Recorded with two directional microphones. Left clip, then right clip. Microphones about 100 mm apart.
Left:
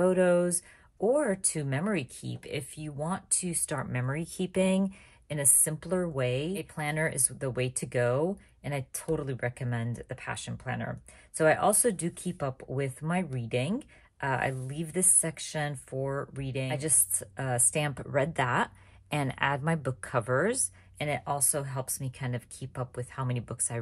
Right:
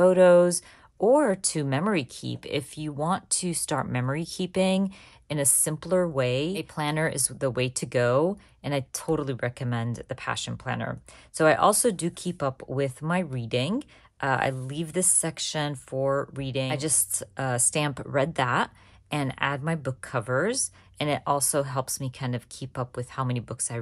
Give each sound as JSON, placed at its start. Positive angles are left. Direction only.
{"t": 0.0, "sound": "a woman's voice", "side_deg": -30}
{"t": 3.8, "sound": "speech", "side_deg": -30}
{"t": 4.2, "sound": "speech", "side_deg": -15}
{"t": 5.3, "sound": "a woman's voice", "side_deg": -40}
{"t": 21.0, "sound": "speech", "side_deg": -50}
{"t": 22.0, "sound": "a woman's voice", "side_deg": -30}
{"t": 23.4, "sound": "speech", "side_deg": -10}